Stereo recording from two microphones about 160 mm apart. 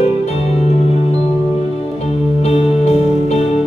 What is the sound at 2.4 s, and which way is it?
Music, 40° left (ahead or behind).